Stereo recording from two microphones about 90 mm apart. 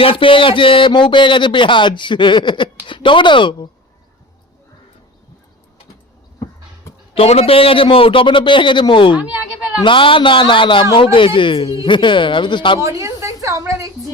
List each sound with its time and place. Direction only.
0.0 s speech: 85° left; by 3.7 s 65° left (ahead or behind)
7.1 s a man's voice: 90° left; by 9.1 s 65° left (ahead or behind)
9.1 s a sound: 15° right (ahead or behind)
9.8 s a man's voice: 70° left (ahead or behind); by 11.8 s 85° left
11.9 s speech: 65° left (ahead or behind)
12.8 s a woman's voice: 35° right (ahead or behind)